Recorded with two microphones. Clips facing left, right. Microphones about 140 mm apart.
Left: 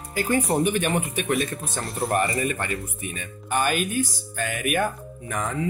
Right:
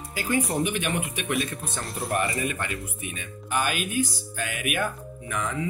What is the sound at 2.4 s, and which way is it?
Speech, 40° left (ahead or behind).